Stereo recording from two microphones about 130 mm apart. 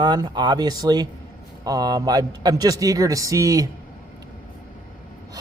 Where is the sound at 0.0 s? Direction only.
35° right (ahead or behind).